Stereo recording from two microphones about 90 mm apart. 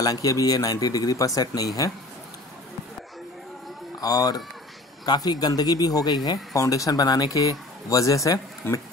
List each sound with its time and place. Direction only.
0.0 s speech: 40° left (ahead or behind)
4.0 s speech: 45° left (ahead or behind)